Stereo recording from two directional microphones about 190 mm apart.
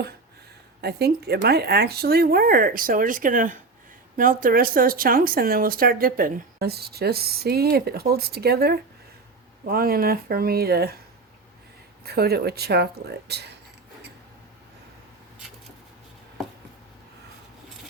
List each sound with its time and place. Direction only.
0.8 s speech: 60° right (ahead or behind)
12.0 s speech: 55° right (ahead or behind)